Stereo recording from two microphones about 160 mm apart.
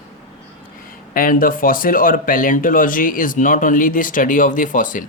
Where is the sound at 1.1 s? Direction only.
60° left (ahead or behind).